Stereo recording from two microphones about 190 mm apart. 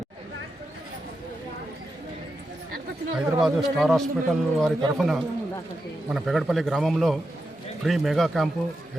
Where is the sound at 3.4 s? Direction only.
Centre (ahead or behind).